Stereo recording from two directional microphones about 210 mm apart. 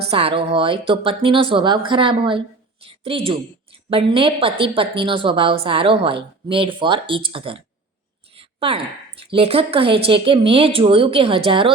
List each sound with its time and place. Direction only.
0.1 s speech: 25° right (ahead or behind)